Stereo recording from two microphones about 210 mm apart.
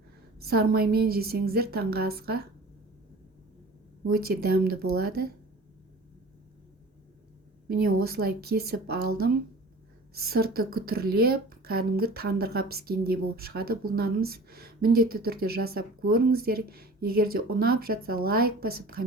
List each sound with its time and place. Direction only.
0.3 s a woman's voice: 45° right (ahead or behind)
4.1 s a woman's voice: 45° right (ahead or behind)
7.7 s a woman's voice: 45° right (ahead or behind)